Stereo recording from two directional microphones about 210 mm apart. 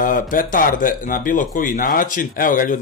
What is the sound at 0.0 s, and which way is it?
Speech, 40° left (ahead or behind).